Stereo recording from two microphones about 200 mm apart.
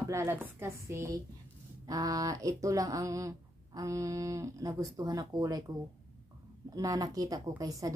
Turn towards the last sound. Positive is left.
turn(degrees=-15)  # may be behind; listen again after turning